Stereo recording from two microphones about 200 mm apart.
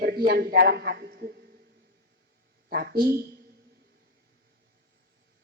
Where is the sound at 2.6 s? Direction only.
50° right (ahead or behind).